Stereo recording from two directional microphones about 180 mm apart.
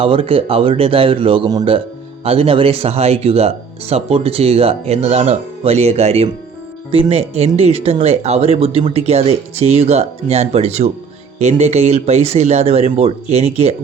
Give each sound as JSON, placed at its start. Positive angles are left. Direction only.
{"t": 0.0, "sound": "speech", "side_deg": -30}